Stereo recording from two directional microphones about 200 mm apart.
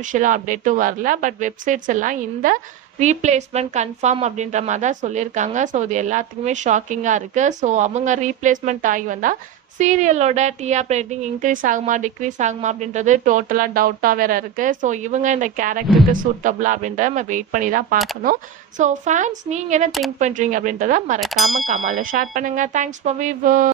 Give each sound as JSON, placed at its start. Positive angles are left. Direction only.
{"t": 0.0, "sound": "a woman's voice", "side_deg": -40}
{"t": 21.2, "sound": "ding", "side_deg": 0}
{"t": 21.5, "sound": "a woman's voice", "side_deg": -35}